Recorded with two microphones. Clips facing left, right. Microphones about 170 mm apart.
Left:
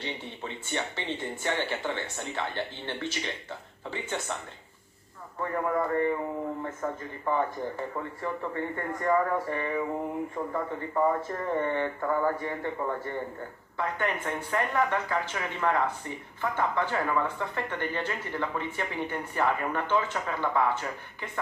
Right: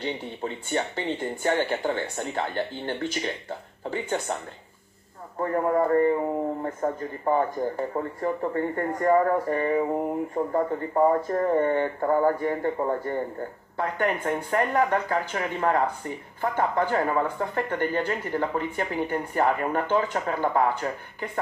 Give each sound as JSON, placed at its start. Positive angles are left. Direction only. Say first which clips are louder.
{"t": 0.0, "sound": "speech", "louder": "right 6 dB", "side_deg": -40}
{"t": 5.4, "sound": "speech", "louder": "right 5 dB", "side_deg": -35}